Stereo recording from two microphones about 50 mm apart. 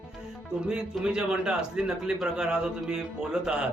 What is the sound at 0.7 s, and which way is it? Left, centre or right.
Speech, centre.